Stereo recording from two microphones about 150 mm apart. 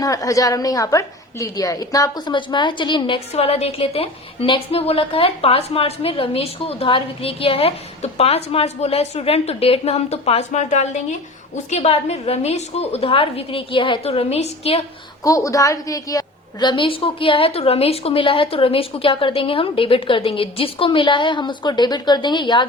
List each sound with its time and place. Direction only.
0.0 s a woman's voice: 25° left (ahead or behind)
3.3 s a woman's voice: 45° left (ahead or behind)
15.2 s a woman's voice: 20° left (ahead or behind)